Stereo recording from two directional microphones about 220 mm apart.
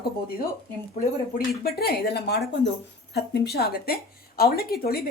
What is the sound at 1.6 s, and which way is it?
Speech, 45° left (ahead or behind).